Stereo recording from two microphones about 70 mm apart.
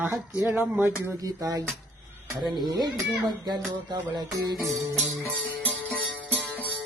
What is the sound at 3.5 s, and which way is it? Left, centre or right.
Music, right.